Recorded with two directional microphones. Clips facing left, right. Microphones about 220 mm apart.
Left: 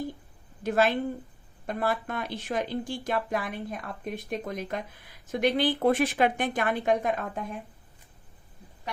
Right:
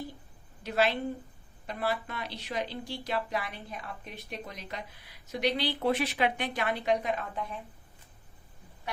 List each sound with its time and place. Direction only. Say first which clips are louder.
0.6 s a woman's voice: left 4 dB; 50° left (ahead or behind)